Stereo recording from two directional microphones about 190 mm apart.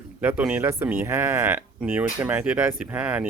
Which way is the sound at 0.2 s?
10° right (ahead or behind).